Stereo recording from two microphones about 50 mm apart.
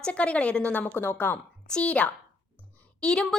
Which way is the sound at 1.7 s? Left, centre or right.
Left.